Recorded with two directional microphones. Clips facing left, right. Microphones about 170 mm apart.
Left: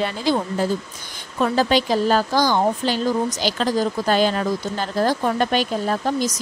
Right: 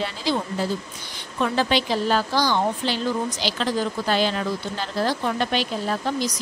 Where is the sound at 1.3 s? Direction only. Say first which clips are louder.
Left 3 dB; 40° left (ahead or behind).